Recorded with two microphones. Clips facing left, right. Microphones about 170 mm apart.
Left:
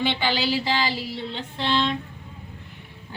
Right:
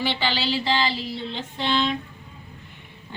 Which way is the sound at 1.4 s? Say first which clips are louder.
Even; 5° right (ahead or behind).